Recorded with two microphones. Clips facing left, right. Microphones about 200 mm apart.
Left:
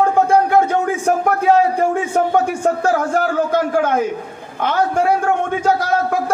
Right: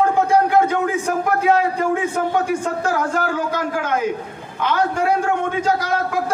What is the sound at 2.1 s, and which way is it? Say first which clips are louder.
A man's voice: left 3 dB; 50° left (ahead or behind).